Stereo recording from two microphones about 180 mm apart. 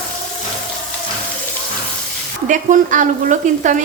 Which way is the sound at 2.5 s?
45° right (ahead or behind).